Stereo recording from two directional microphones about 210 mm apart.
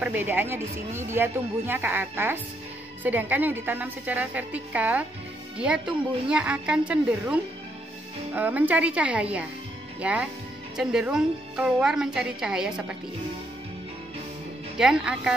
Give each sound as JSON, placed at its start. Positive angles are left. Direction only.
{"t": 0.0, "sound": "a woman's voice", "side_deg": -10}
{"t": 8.4, "sound": "a woman's voice", "side_deg": -10}
{"t": 14.8, "sound": "a woman's voice", "side_deg": -5}